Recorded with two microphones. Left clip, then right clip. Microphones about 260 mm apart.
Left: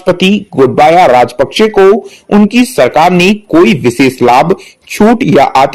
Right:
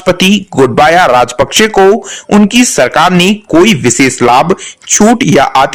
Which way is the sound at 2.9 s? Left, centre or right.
Right.